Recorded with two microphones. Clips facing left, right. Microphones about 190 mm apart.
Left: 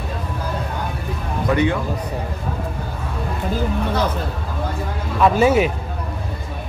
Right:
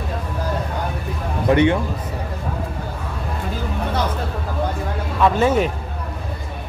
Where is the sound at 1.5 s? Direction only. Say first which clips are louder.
Right 3 dB; 25° right (ahead or behind).